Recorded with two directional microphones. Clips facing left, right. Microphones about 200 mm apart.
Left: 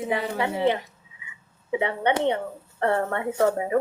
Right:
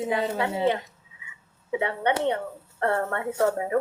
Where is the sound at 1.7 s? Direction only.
20° left (ahead or behind).